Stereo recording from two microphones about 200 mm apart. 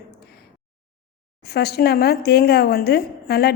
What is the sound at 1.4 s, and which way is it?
Speech, 50° left (ahead or behind).